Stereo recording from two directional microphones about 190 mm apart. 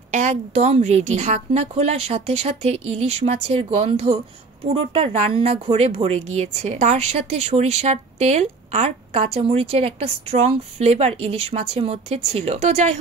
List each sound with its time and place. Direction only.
0.1 s speech: 40° right (ahead or behind)